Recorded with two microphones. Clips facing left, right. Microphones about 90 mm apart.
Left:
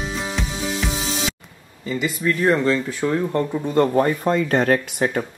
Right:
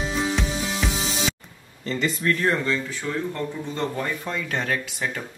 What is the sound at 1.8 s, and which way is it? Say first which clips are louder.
Speech: left 2 dB; 10° left (ahead or behind).